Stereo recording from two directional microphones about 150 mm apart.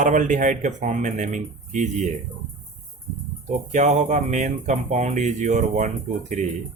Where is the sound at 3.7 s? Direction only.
50° right (ahead or behind).